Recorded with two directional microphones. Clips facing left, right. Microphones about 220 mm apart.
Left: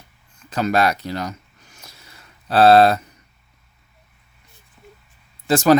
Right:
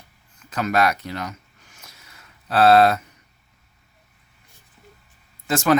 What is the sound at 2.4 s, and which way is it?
Speech, 30° left (ahead or behind).